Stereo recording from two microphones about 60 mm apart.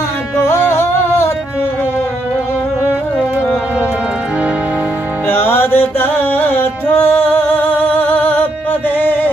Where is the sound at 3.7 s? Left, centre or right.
Right.